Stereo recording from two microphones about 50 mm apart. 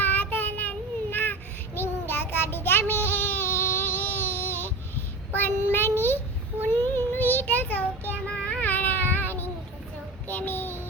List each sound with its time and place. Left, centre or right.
0.0 s child singing: left
8.3 s child singing: left
8.6 s a sound: left
10.2 s child singing: left